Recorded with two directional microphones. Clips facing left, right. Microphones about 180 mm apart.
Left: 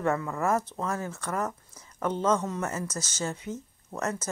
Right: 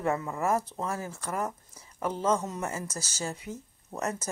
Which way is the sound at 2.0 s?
5° right (ahead or behind).